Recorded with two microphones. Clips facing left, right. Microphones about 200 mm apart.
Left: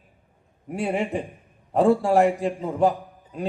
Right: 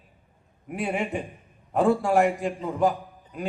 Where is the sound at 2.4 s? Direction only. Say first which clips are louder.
Left 3 dB; 30° left (ahead or behind).